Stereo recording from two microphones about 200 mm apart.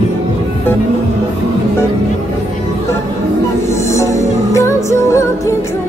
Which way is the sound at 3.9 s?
15° left (ahead or behind).